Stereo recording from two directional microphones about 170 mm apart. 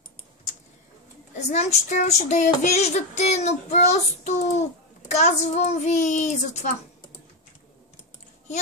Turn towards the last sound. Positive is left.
turn(degrees=45)  # may be behind; listen again after turning